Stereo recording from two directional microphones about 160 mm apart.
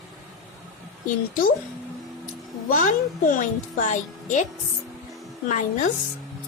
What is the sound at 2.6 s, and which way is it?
A woman's voice, 55° left (ahead or behind).